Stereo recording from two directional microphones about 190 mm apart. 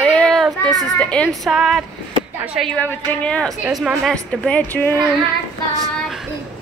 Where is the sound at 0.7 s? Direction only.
5° left (ahead or behind).